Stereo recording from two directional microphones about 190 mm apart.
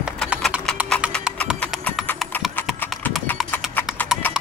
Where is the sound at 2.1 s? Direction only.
10° left (ahead or behind).